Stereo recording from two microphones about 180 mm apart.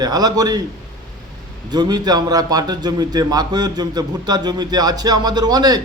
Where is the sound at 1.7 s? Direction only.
25° right (ahead or behind).